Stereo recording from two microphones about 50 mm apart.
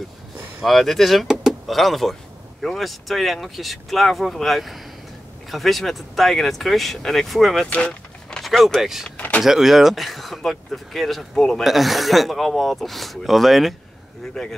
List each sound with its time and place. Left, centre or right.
0.7 s speech: centre
1.4 s door: centre
2.6 s speech: centre
7.6 s vehicle: left
8.4 s speech: centre
9.1 s vehicle: left
9.4 s speech: centre
11.6 s speech: centre